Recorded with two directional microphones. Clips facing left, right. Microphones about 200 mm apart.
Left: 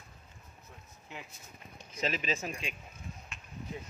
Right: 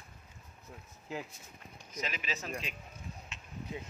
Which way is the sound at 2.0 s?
30° left (ahead or behind).